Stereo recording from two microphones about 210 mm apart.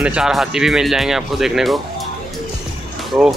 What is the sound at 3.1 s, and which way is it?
Speech, 5° right (ahead or behind).